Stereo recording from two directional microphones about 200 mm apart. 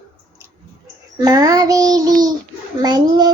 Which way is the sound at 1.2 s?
15° right (ahead or behind).